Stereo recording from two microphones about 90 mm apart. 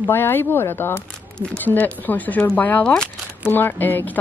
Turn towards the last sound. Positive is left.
turn(degrees=20)  # may be behind; listen again after turning